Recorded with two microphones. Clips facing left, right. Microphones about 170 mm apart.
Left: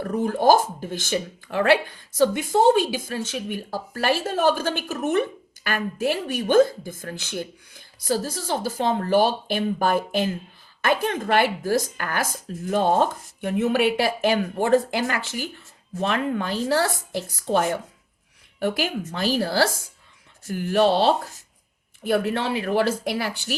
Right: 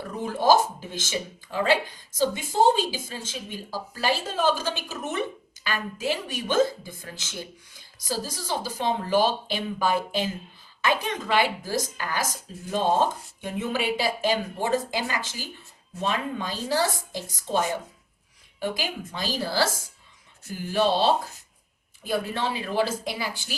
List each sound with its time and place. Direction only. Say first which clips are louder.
0.0 s speech: left 5 dB; 50° left (ahead or behind)